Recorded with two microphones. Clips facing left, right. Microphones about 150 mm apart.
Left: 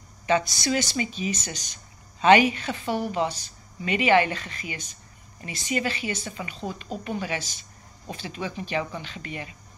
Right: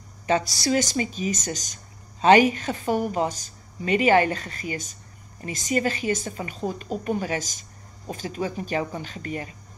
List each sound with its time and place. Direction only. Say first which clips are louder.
0.3 s a woman's voice: right 1 dB; 35° right (ahead or behind)